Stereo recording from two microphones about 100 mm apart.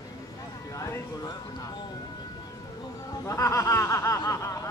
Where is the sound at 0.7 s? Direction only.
30° left (ahead or behind).